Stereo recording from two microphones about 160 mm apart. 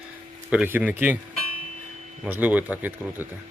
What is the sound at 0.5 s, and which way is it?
Speech, 10° right (ahead or behind).